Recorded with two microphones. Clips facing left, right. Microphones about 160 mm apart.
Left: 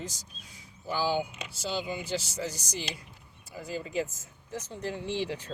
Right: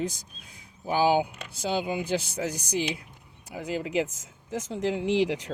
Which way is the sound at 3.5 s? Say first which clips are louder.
Right 6 dB; 75° right (ahead or behind).